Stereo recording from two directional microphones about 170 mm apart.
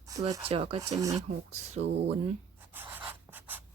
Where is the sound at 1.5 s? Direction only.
40° right (ahead or behind).